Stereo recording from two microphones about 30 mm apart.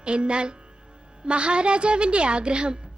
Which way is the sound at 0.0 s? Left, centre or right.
Right.